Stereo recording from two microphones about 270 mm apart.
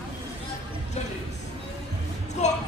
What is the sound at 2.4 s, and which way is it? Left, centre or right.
Music, left.